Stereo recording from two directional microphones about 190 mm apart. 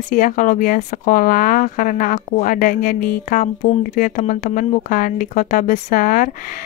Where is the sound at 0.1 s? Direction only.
45° left (ahead or behind).